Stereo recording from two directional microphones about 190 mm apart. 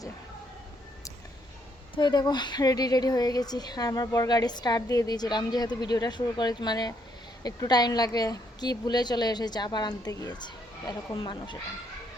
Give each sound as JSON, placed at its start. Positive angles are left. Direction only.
{"t": 2.0, "sound": "a woman's voice", "side_deg": 20}